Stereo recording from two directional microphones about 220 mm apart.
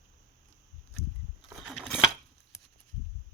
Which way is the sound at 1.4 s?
Centre (ahead or behind).